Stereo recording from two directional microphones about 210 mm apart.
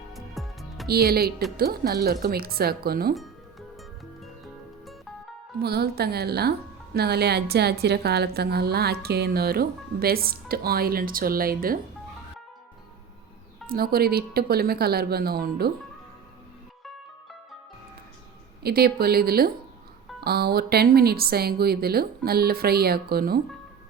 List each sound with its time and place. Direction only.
0.1 s music: centre (ahead or behind)
0.9 s a woman's voice: 45° right (ahead or behind)
5.6 s a woman's voice: 50° right (ahead or behind)
13.7 s a woman's voice: 45° right (ahead or behind)
18.6 s a woman's voice: 45° right (ahead or behind)